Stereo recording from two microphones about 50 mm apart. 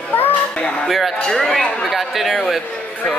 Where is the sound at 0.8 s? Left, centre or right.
Centre.